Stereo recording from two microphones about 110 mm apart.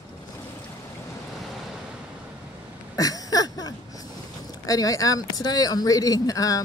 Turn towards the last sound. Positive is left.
turn(degrees=30)  # may be behind; listen again after turning